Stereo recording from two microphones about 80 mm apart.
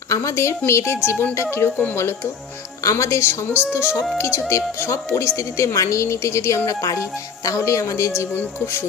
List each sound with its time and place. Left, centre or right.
0.1 s speech: left
3.5 s music: centre
4.2 s speech: left
8.3 s speech: left